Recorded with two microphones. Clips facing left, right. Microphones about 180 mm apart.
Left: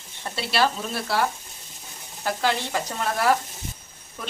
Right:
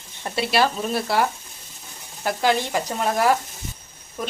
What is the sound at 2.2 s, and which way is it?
Speech, 15° right (ahead or behind).